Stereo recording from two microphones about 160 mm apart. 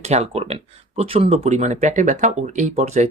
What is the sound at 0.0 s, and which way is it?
Speech, 40° right (ahead or behind).